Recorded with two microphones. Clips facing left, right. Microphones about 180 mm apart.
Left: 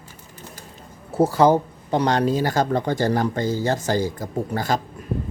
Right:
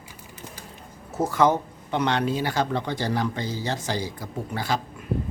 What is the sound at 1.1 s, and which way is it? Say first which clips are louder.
Speech: left 5 dB; 30° left (ahead or behind).